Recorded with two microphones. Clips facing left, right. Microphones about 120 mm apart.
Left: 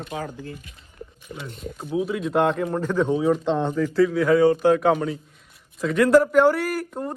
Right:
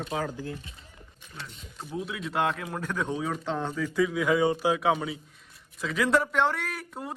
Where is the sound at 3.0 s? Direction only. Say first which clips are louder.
Left 10 dB; 10° left (ahead or behind).